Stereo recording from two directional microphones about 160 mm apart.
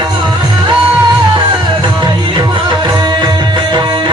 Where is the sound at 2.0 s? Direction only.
30° right (ahead or behind).